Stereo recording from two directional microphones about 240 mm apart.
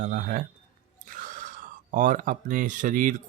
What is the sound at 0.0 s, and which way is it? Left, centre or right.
Speech, right.